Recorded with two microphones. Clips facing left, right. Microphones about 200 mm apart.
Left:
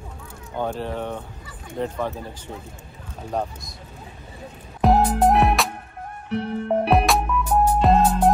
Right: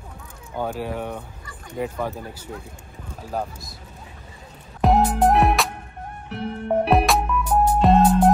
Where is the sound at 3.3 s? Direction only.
5° right (ahead or behind).